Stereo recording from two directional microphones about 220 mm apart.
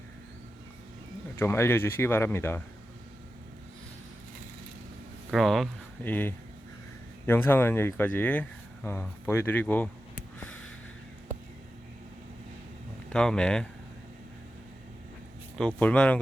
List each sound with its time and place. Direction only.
1.4 s speech: 10° left (ahead or behind)
5.3 s speech: centre (ahead or behind)
10.4 s a sound: 5° left (ahead or behind)
13.1 s speech: 5° left (ahead or behind)
15.5 s speech: 5° left (ahead or behind)